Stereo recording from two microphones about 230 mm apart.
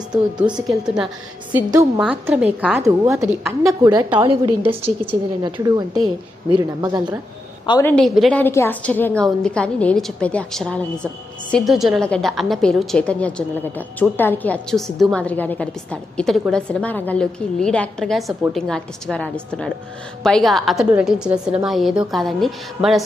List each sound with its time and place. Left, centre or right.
0.3 s a woman's voice: centre
0.7 s a woman's voice: centre
1.5 s a woman's voice: centre
7.7 s a woman's voice: centre